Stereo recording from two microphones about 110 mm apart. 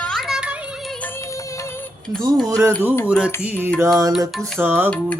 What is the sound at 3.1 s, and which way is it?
Mantra, 10° right (ahead or behind).